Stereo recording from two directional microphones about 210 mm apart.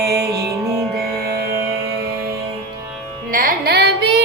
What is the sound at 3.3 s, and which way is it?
Carnatic music, 45° right (ahead or behind).